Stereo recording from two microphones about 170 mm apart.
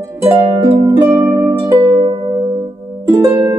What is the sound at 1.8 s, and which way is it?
Music, 25° right (ahead or behind).